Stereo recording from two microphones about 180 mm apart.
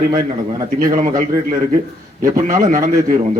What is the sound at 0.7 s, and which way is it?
Speech, 50° right (ahead or behind).